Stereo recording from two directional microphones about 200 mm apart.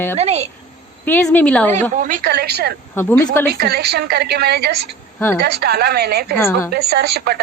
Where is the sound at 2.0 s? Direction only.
40° right (ahead or behind).